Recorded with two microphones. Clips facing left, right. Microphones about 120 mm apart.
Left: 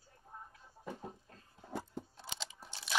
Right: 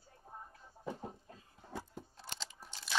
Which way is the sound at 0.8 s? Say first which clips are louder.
Right 2 dB; 20° right (ahead or behind).